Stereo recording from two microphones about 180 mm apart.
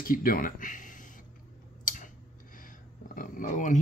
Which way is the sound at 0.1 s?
50° left (ahead or behind).